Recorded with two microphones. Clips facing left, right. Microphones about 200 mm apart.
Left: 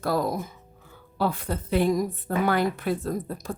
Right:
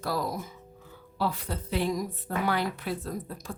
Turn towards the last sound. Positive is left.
turn(degrees=45)  # may be behind; listen again after turning